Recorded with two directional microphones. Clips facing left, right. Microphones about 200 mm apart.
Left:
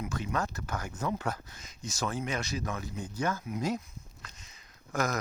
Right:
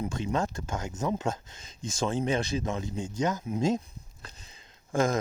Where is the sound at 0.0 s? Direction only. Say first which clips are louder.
Right 4 dB; 30° right (ahead or behind).